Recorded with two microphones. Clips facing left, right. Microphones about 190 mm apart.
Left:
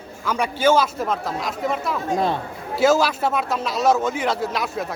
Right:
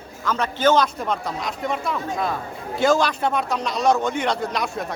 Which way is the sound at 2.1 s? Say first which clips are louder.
Left 7 dB; 30° left (ahead or behind).